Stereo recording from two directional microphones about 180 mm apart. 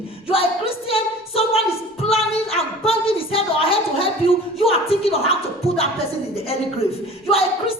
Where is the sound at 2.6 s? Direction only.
30° left (ahead or behind).